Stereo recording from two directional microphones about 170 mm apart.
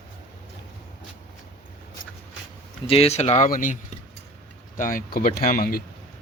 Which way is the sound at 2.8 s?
35° left (ahead or behind).